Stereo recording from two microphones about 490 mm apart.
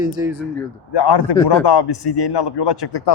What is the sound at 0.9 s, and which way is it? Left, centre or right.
A man's voice, left.